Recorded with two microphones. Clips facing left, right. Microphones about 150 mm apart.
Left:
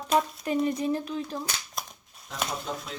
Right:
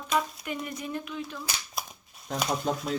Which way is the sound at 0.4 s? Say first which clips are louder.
Left 9 dB; 30° left (ahead or behind).